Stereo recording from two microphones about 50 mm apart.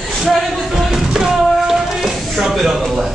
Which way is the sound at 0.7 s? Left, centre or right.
Centre.